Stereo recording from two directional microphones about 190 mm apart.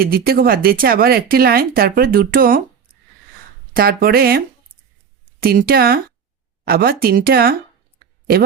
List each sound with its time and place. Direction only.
0.0 s speech: 50° right (ahead or behind)
3.8 s speech: 55° right (ahead or behind)